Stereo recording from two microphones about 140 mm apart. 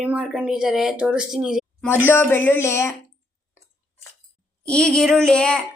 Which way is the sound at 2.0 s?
15° left (ahead or behind).